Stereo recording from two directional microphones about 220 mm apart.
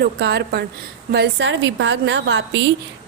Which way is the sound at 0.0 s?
50° right (ahead or behind).